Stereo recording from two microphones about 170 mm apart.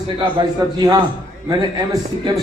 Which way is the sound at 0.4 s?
25° right (ahead or behind).